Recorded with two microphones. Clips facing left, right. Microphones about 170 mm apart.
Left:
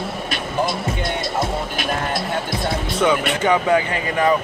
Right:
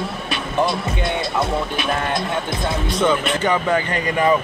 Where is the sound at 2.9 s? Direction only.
10° left (ahead or behind).